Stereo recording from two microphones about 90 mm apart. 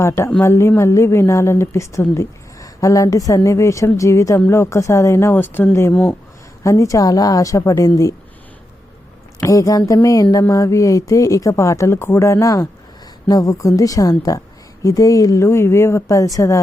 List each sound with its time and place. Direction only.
0.4 s a woman's voice: 30° left (ahead or behind)
5.9 s speech: 10° left (ahead or behind)
6.6 s a woman's voice: 35° left (ahead or behind)
9.4 s a woman's voice: 40° left (ahead or behind)
15.4 s a woman's voice: 30° left (ahead or behind)
16.0 s a woman's voice: 40° left (ahead or behind)